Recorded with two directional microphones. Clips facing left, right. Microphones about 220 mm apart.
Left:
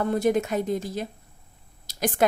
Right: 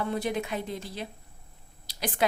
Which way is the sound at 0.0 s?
45° left (ahead or behind).